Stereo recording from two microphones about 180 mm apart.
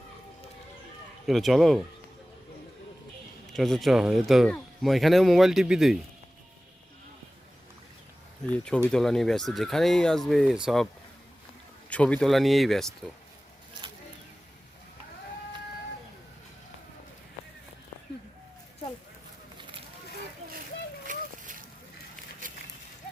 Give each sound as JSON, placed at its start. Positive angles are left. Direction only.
{"t": 1.3, "sound": "speech", "side_deg": 0}
{"t": 3.5, "sound": "speech", "side_deg": 0}
{"t": 8.5, "sound": "speech", "side_deg": 5}
{"t": 11.9, "sound": "speech", "side_deg": 5}
{"t": 21.1, "sound": "a sound", "side_deg": -45}